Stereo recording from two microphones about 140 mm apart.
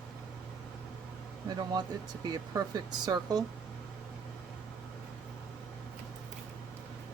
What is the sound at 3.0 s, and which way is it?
Speech, 30° right (ahead or behind).